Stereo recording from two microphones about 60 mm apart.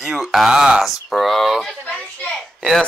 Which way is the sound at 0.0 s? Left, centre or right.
Centre.